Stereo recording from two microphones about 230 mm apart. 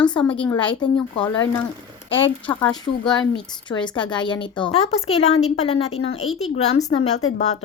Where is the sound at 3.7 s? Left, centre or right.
Centre.